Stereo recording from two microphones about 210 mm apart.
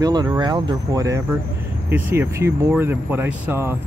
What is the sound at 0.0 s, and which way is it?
Speech, 20° right (ahead or behind).